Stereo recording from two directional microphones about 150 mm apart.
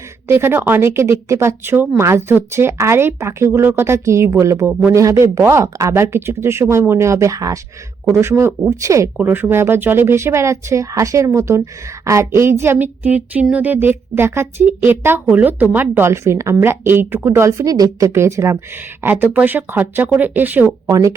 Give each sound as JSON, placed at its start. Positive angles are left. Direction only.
{"t": 0.3, "sound": "speech", "side_deg": -15}
{"t": 4.7, "sound": "speech", "side_deg": -10}
{"t": 4.9, "sound": "speech", "side_deg": -20}
{"t": 20.8, "sound": "speech", "side_deg": -20}